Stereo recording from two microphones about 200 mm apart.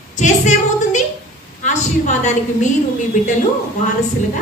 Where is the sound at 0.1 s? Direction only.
35° left (ahead or behind).